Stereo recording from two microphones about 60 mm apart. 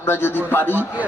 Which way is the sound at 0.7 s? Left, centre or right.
Right.